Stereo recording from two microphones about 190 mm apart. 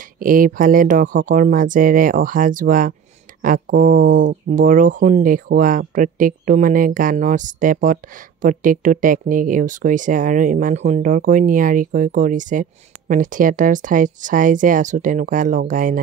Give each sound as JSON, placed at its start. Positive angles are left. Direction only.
{"t": 0.2, "sound": "speech", "side_deg": -45}